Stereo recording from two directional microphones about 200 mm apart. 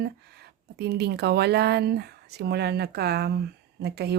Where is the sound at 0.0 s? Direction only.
55° right (ahead or behind).